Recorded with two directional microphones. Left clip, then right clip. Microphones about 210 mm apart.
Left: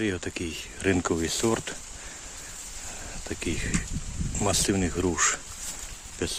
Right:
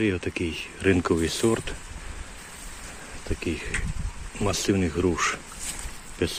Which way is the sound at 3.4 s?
15° left (ahead or behind).